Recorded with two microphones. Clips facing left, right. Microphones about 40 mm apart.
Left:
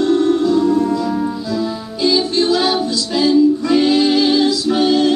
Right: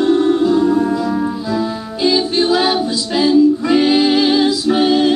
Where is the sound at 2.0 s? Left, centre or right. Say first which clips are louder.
Right 1 dB; centre.